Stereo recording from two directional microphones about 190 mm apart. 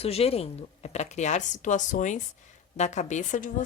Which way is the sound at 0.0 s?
30° left (ahead or behind).